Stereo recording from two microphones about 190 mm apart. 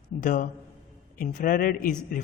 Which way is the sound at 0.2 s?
45° left (ahead or behind).